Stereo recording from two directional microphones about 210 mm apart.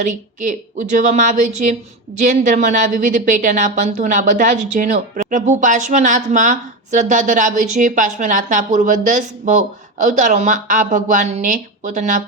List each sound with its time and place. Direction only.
0.0 s a woman's voice: 35° right (ahead or behind)